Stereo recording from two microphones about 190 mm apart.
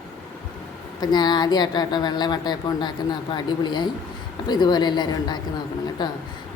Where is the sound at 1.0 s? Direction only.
20° left (ahead or behind).